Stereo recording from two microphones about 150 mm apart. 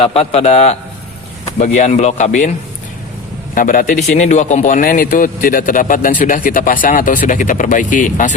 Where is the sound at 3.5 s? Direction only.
65° left (ahead or behind).